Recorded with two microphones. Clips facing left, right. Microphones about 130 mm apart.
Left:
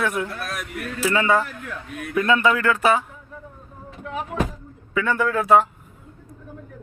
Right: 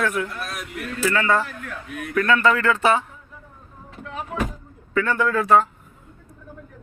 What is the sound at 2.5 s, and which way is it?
Speech, 5° left (ahead or behind).